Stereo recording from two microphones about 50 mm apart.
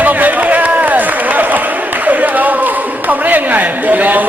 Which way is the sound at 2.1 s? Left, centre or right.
Right.